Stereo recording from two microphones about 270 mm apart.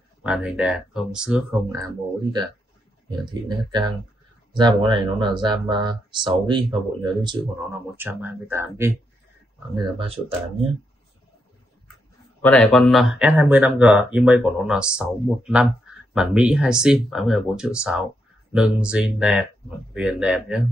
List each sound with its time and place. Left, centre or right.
0.2 s speech: centre
9.8 s speech: right
12.4 s speech: centre